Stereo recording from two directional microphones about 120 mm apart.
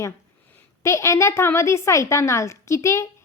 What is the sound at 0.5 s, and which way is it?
A woman's voice, 25° left (ahead or behind).